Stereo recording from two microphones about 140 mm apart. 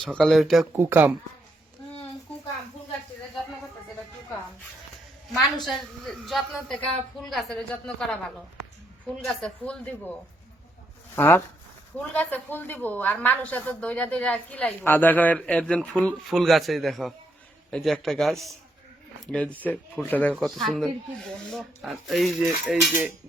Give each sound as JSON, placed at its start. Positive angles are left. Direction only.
{"t": 0.0, "sound": "speech", "side_deg": 5}
{"t": 0.8, "sound": "speech", "side_deg": -15}
{"t": 5.6, "sound": "speech", "side_deg": 0}
{"t": 9.2, "sound": "speech", "side_deg": 5}
{"t": 11.1, "sound": "a woman's voice", "side_deg": 15}
{"t": 20.3, "sound": "speech", "side_deg": 0}